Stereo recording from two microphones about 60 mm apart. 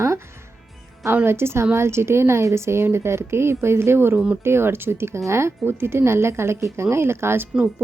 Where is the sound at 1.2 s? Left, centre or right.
Right.